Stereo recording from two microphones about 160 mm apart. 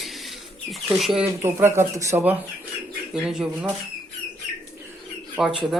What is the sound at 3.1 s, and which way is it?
Speech, 5° right (ahead or behind).